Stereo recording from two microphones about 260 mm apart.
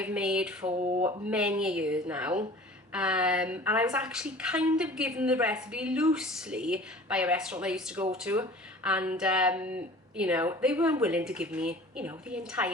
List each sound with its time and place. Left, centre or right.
0.0 s a woman's voice: centre
0.6 s speech: right
1.0 s a woman's voice: centre